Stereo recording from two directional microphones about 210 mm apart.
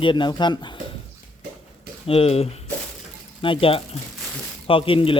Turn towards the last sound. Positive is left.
turn(degrees=25)  # may be behind; listen again after turning